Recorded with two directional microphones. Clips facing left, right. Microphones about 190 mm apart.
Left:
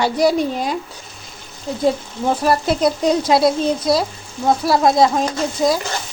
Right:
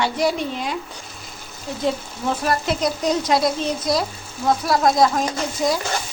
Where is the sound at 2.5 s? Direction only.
30° left (ahead or behind).